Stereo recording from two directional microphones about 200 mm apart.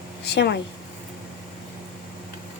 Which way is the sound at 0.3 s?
55° left (ahead or behind).